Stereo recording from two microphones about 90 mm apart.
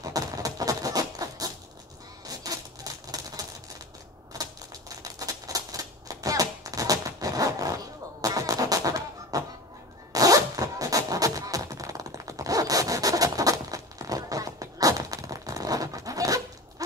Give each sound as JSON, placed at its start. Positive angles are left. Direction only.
{"t": 0.0, "sound": "a sound", "side_deg": -40}
{"t": 2.2, "sound": "typewriter", "side_deg": -45}
{"t": 10.1, "sound": "zipper", "side_deg": -40}